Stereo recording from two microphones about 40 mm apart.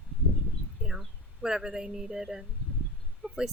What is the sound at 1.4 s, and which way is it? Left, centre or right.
Speech, centre.